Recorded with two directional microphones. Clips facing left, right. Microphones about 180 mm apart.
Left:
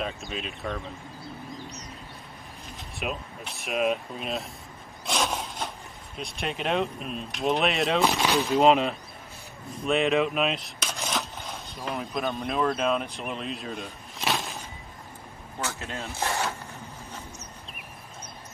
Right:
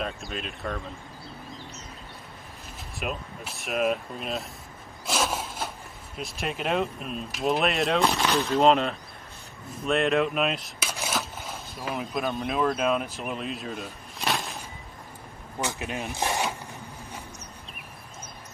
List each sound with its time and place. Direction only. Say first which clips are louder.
0.0 s speech: even; centre (ahead or behind)
3.0 s speech: even; centre (ahead or behind)
5.0 s a sound: even; 5° right (ahead or behind)
6.1 s speech: even; centre (ahead or behind)
15.6 s speech: right 3 dB; 15° right (ahead or behind)